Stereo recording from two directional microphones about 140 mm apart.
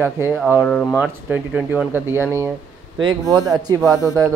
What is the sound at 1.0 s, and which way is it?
Speech, 10° right (ahead or behind).